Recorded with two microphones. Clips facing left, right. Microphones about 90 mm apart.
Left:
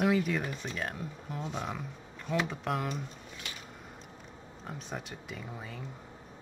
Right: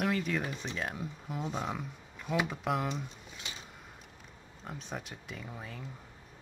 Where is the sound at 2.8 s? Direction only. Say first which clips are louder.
Even; 20° right (ahead or behind).